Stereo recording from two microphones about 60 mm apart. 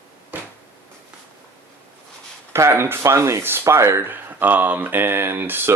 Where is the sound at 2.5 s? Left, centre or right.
Right.